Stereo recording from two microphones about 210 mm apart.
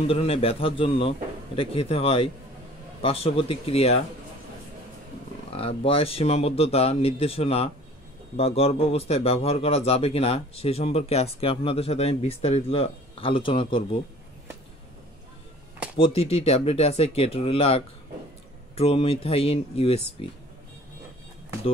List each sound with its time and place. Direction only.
0.1 s speech: 25° left (ahead or behind)
5.5 s speech: 30° left (ahead or behind)
16.0 s speech: 30° left (ahead or behind)